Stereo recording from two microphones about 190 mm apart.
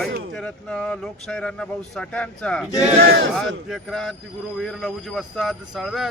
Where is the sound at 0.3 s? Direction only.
5° left (ahead or behind).